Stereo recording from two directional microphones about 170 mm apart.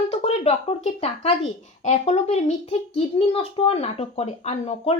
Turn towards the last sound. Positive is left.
turn(degrees=35)  # may be behind; listen again after turning